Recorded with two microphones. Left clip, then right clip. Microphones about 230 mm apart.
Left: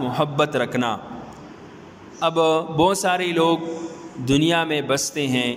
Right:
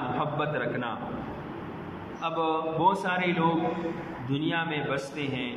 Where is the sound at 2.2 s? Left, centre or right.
Left.